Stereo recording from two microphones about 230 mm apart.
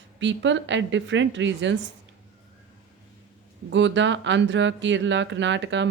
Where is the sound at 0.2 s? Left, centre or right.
Right.